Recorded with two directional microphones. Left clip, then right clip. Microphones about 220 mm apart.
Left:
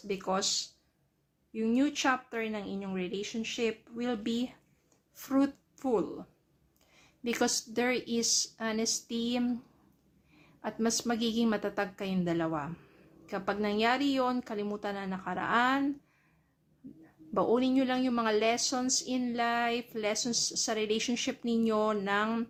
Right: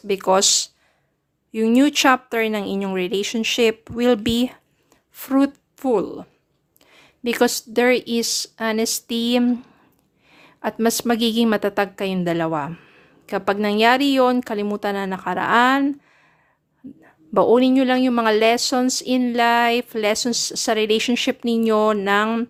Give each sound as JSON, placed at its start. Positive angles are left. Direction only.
{"t": 0.1, "sound": "a woman's voice", "side_deg": -40}
{"t": 17.0, "sound": "a woman's voice", "side_deg": -30}